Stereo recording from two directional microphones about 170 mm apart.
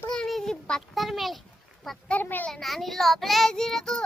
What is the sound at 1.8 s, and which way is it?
A child's voice, 5° left (ahead or behind).